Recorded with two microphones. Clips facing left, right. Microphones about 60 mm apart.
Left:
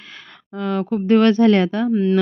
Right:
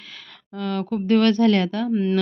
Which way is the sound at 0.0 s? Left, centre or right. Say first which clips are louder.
Left 2 dB; left.